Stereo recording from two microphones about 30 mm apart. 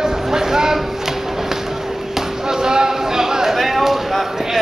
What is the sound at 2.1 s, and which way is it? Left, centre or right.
Chop, centre.